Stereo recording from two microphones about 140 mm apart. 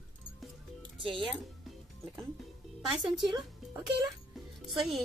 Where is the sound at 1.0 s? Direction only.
40° right (ahead or behind).